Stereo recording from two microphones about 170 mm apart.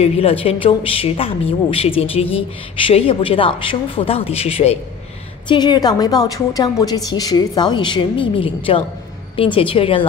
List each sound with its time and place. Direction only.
0.0 s a woman's voice: 35° left (ahead or behind)